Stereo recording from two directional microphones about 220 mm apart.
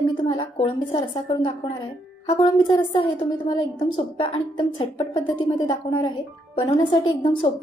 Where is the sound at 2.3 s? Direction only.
25° left (ahead or behind).